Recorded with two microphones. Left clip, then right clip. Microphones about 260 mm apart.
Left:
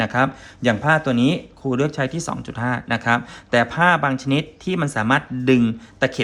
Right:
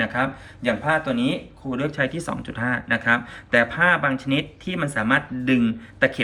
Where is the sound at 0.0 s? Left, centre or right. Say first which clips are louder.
Left 4 dB; left.